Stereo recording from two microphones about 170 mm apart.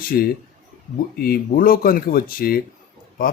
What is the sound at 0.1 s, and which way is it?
Speech, 65° left (ahead or behind).